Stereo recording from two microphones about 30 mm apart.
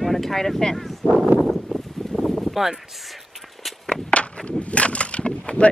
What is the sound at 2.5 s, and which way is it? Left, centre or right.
Speech, centre.